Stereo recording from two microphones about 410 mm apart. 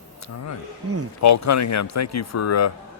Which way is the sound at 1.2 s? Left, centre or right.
Left.